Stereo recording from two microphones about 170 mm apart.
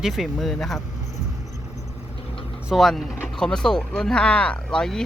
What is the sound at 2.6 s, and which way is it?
Speech, centre (ahead or behind).